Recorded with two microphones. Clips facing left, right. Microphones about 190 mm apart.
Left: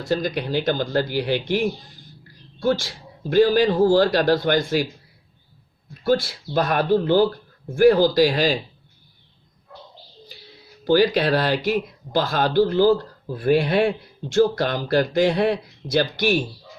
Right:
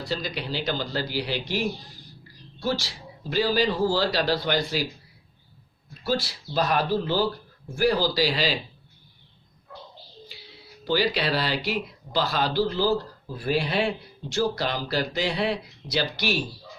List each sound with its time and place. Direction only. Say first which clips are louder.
0.0 s speech: left 7 dB; 50° left (ahead or behind)
6.1 s speech: left 7 dB; 50° left (ahead or behind)
10.8 s speech: left 7 dB; 50° left (ahead or behind)